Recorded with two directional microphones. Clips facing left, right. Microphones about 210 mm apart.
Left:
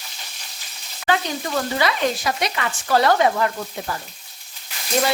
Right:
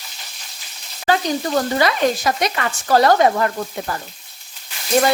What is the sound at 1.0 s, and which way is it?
Sizzle, 35° right (ahead or behind).